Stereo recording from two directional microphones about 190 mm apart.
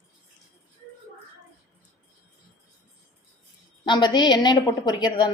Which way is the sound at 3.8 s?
25° left (ahead or behind).